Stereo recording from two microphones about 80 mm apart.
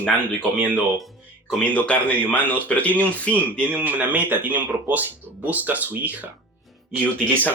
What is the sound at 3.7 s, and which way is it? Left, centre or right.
Speech, right.